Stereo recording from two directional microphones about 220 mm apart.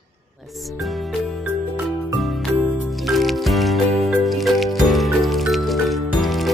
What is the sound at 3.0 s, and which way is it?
Music, centre (ahead or behind).